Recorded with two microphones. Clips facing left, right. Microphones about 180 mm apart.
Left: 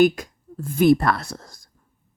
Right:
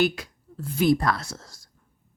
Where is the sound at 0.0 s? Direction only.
50° left (ahead or behind).